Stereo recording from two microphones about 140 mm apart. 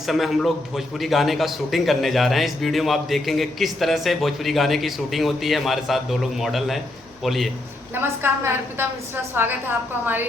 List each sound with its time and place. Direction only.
0.0 s a man's voice: centre (ahead or behind)
7.9 s a woman's voice: 15° right (ahead or behind)